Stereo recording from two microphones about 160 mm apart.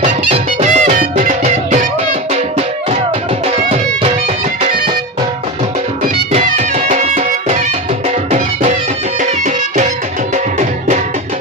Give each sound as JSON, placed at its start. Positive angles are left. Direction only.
{"t": 0.3, "sound": "music", "side_deg": -40}
{"t": 3.4, "sound": "music", "side_deg": -40}
{"t": 6.3, "sound": "music", "side_deg": -45}